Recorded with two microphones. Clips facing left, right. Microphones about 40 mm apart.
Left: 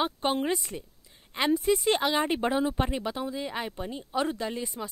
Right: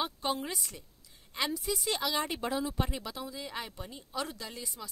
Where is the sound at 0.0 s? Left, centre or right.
Left.